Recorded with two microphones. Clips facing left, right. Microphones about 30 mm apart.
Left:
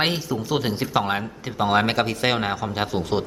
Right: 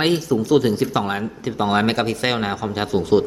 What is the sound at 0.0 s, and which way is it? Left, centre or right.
A man's voice, centre.